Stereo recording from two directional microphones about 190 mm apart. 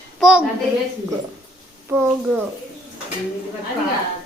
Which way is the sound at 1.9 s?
10° right (ahead or behind).